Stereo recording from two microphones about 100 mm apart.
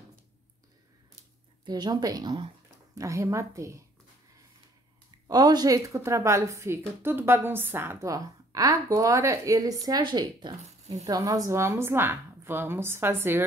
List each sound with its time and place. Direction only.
1.7 s a woman's voice: 45° right (ahead or behind)
5.3 s a woman's voice: 40° right (ahead or behind); by 8.1 s 20° right (ahead or behind)
8.1 s a woman's voice: 35° right (ahead or behind)